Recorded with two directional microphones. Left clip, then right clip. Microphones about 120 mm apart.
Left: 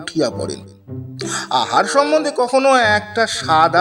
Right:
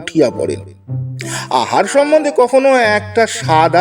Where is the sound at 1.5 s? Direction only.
35° right (ahead or behind).